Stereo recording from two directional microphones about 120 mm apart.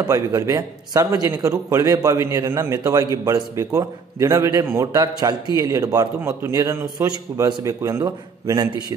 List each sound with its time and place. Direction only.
0.1 s a man's voice: 30° right (ahead or behind)